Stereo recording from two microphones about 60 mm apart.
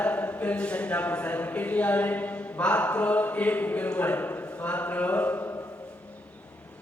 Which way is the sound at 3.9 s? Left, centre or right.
Left.